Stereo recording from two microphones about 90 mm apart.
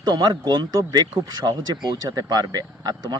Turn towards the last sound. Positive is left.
turn(degrees=-50)  # may be behind; listen again after turning